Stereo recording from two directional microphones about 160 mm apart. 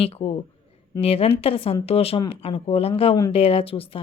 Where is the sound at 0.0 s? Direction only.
40° left (ahead or behind).